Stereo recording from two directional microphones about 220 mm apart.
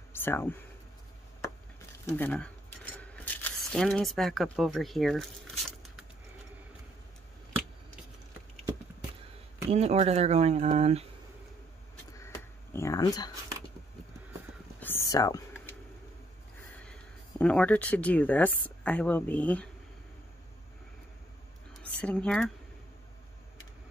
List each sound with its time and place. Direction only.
0.1 s speech: 10° left (ahead or behind)
2.0 s cutlery: 10° left (ahead or behind)
9.7 s speech: 30° right (ahead or behind)
12.7 s speech: 15° left (ahead or behind)
14.8 s whispering: 10° left (ahead or behind)
16.8 s speech: 5° left (ahead or behind)
22.0 s speech: 5° left (ahead or behind)